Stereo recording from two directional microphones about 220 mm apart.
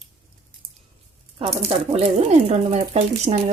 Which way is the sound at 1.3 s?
25° right (ahead or behind).